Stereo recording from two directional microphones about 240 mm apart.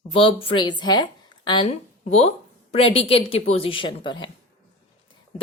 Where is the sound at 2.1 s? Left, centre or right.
Left.